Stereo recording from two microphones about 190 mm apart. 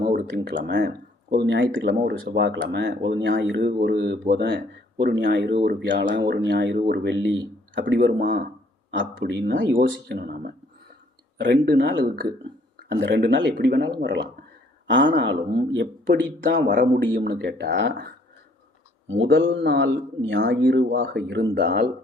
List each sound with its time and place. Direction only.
0.2 s speech: 65° right (ahead or behind)
3.6 s speech: 50° right (ahead or behind); by 9.7 s 65° right (ahead or behind)
10.1 s speech: 55° right (ahead or behind)
11.3 s speech: 70° right (ahead or behind)
14.8 s speech: 75° right (ahead or behind)
17.2 s speech: 55° right (ahead or behind)
19.0 s speech: 80° right; by 21.7 s 65° right (ahead or behind)